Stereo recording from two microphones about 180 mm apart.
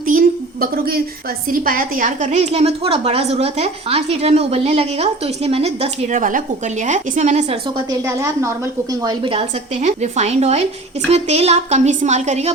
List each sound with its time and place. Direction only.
0.0 s a sound: 50° right (ahead or behind)
1.5 s a woman's voice: 50° right (ahead or behind)
7.9 s a woman's voice: 15° right (ahead or behind); by 12.5 s 40° right (ahead or behind)